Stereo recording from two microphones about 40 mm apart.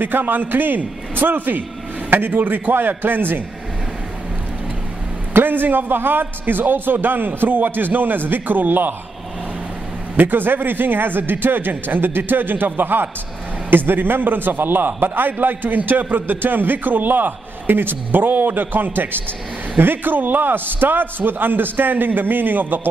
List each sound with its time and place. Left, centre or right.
0.0 s a man's voice: right
5.3 s a man's voice: right
10.1 s a man's voice: right